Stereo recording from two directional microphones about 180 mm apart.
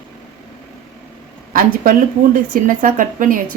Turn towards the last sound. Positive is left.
turn(degrees=-50)  # may be behind; listen again after turning